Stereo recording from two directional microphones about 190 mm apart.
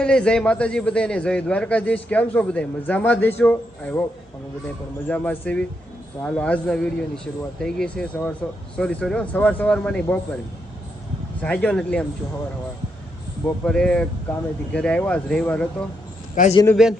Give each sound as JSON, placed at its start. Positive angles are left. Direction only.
{"t": 0.0, "sound": "a man's voice", "side_deg": 5}
{"t": 5.0, "sound": "a man's voice", "side_deg": 10}
{"t": 11.3, "sound": "speech", "side_deg": 5}
{"t": 13.4, "sound": "speech", "side_deg": 5}
{"t": 16.3, "sound": "a man's voice", "side_deg": 40}
{"t": 16.8, "sound": "speech", "side_deg": -5}